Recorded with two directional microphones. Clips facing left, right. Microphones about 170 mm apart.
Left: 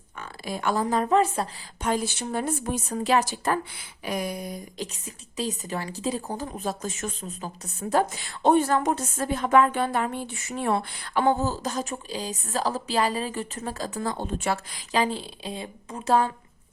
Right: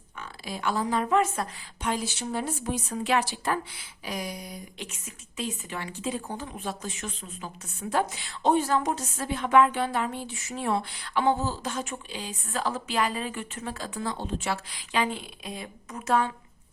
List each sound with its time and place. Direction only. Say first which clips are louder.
0.2 s a woman's voice: left 3 dB; 50° left (ahead or behind); by 16.3 s 35° left (ahead or behind)